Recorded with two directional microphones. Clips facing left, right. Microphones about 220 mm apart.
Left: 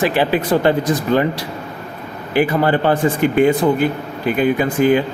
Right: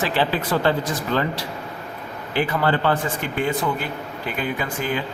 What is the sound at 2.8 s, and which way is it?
Speech, 15° left (ahead or behind).